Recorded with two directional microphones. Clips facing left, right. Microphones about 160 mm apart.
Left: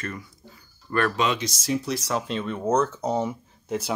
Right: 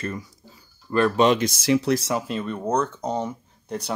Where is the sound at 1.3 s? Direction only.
50° right (ahead or behind).